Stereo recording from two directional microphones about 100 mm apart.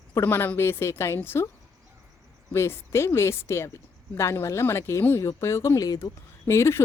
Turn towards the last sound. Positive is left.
turn(degrees=25)  # may be behind; listen again after turning